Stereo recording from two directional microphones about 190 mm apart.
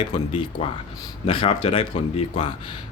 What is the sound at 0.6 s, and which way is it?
Speech, 30° left (ahead or behind).